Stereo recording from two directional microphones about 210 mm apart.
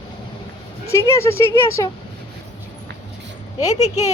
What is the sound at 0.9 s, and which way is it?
Speech, 15° left (ahead or behind).